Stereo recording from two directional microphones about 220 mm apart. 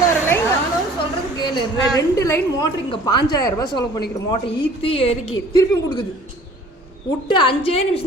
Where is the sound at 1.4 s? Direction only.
20° left (ahead or behind).